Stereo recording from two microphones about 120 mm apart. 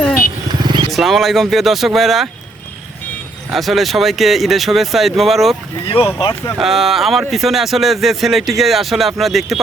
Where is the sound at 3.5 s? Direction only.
Centre (ahead or behind).